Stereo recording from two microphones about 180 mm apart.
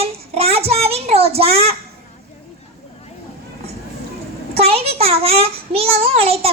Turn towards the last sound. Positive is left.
turn(degrees=-35)  # may be behind; listen again after turning